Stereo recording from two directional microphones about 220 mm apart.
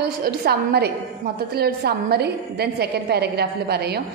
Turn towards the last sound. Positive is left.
turn(degrees=-45)  # may be behind; listen again after turning